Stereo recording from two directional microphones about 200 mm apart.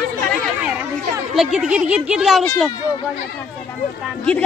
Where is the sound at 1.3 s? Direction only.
Centre (ahead or behind).